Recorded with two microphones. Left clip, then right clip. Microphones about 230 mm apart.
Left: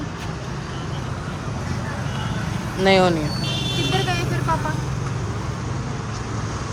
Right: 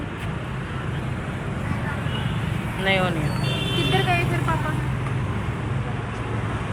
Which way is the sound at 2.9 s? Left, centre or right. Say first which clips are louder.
Left 6 dB; left.